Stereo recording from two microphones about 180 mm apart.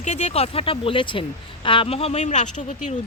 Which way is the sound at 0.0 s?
40° left (ahead or behind).